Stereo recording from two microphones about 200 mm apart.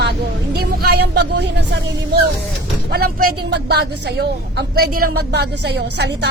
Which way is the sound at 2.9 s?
50° right (ahead or behind).